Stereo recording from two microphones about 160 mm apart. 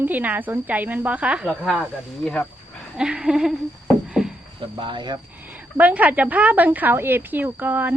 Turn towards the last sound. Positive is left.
turn(degrees=-10)  # may be behind; listen again after turning